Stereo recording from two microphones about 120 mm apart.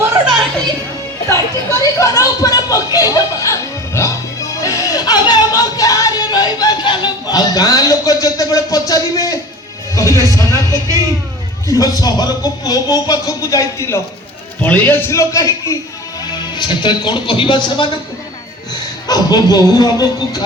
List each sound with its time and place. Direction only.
1.3 s speech: 25° left (ahead or behind)
4.8 s music: 30° left (ahead or behind)
8.9 s speech: 30° left (ahead or behind)
10.1 s speech: 30° right (ahead or behind)
11.7 s speech: 30° left (ahead or behind)
16.3 s speech: 40° left (ahead or behind)
19.0 s speech: 35° left (ahead or behind)